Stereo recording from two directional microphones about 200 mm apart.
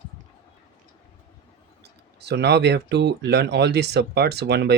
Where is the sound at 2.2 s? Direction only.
55° right (ahead or behind).